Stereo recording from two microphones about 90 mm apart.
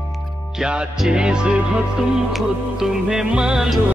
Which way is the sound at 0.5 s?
10° right (ahead or behind).